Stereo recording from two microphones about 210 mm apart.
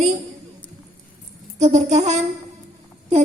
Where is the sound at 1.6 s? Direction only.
35° right (ahead or behind).